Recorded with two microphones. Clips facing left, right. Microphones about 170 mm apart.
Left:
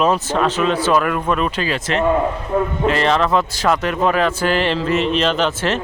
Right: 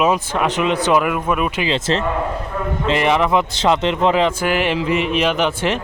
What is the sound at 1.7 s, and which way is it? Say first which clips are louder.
Speech: even; 30° right (ahead or behind).